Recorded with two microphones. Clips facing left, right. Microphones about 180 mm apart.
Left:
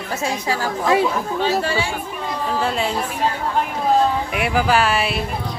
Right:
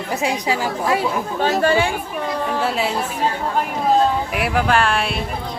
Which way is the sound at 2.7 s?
5° right (ahead or behind).